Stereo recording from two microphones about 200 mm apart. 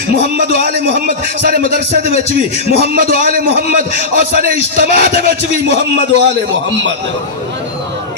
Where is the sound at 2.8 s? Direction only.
50° right (ahead or behind).